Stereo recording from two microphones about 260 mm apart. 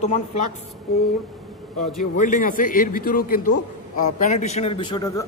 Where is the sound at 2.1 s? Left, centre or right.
Left.